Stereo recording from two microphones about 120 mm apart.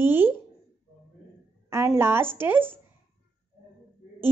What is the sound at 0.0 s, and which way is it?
Speech, 20° right (ahead or behind).